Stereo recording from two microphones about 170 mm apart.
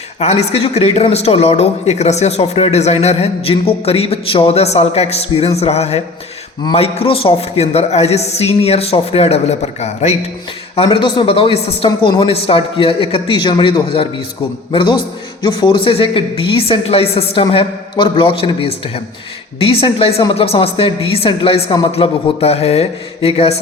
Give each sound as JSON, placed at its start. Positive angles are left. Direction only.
{"t": 0.2, "sound": "speech", "side_deg": 40}
{"t": 10.8, "sound": "speech", "side_deg": 30}